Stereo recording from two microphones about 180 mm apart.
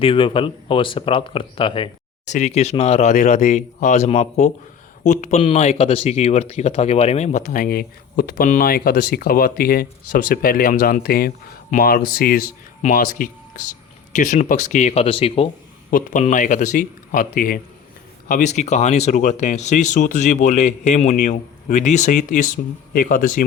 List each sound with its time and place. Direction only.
0.0 s speech: 30° left (ahead or behind)
2.2 s speech: 40° left (ahead or behind)
15.9 s speech: 50° left (ahead or behind)